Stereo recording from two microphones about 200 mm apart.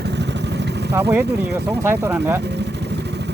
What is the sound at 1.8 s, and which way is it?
Speech, 10° right (ahead or behind).